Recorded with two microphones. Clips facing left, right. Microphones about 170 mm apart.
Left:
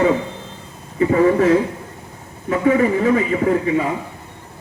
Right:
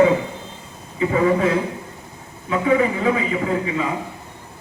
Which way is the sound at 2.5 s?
45° left (ahead or behind).